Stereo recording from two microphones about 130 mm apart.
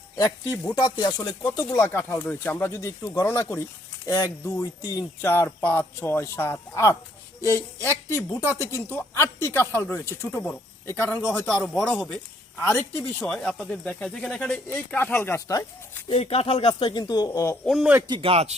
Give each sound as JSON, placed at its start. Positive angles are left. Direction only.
{"t": 0.2, "sound": "speech", "side_deg": 25}
{"t": 0.8, "sound": "speech", "side_deg": 30}
{"t": 16.0, "sound": "speech", "side_deg": 50}
{"t": 17.7, "sound": "speech", "side_deg": 0}
{"t": 18.1, "sound": "speech", "side_deg": -45}